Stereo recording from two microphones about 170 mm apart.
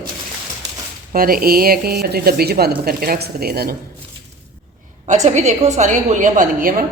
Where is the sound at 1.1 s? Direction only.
60° right (ahead or behind).